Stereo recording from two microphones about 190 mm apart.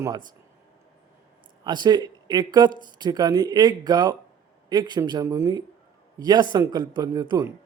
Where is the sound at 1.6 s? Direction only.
20° right (ahead or behind).